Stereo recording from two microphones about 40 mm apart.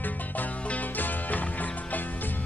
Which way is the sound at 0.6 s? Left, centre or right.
Left.